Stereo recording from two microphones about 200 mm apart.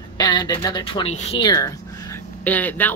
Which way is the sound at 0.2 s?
20° left (ahead or behind).